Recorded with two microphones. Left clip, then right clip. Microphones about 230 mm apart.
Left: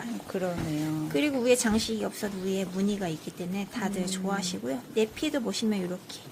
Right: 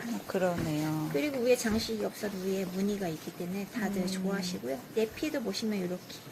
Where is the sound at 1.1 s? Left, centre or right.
Left.